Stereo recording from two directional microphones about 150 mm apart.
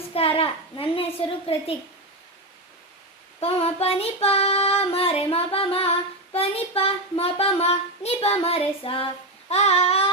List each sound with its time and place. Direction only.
0.1 s child singing: 40° left (ahead or behind)
3.4 s child singing: 40° left (ahead or behind)